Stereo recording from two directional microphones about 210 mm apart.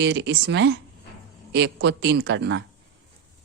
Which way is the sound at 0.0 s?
55° right (ahead or behind).